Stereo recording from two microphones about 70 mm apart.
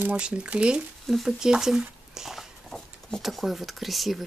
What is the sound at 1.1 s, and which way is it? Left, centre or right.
Speech, centre.